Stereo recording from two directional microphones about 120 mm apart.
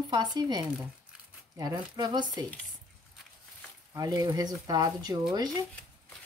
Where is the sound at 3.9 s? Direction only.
30° right (ahead or behind).